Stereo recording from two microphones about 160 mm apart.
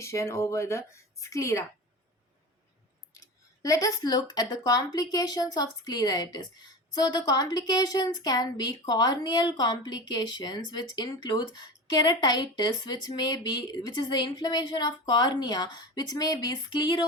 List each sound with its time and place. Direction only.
0.0 s speech: 20° left (ahead or behind)
3.6 s speech: 20° left (ahead or behind)